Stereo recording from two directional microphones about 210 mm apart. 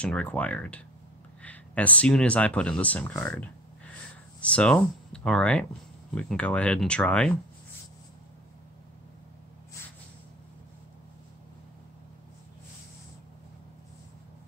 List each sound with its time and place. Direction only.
0.0 s speech: 5° left (ahead or behind)